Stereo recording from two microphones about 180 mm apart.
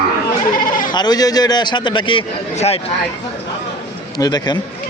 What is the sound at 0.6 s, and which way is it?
Sheep, 50° left (ahead or behind).